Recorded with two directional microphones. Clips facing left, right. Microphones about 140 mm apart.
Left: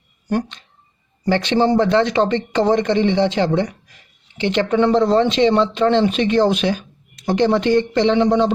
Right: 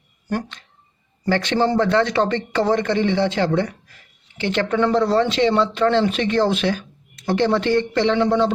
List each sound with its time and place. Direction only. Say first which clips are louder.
0.3 s speech: left 4 dB; 20° left (ahead or behind)